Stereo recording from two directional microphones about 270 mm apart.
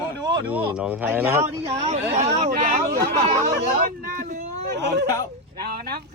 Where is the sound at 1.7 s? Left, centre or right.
Right.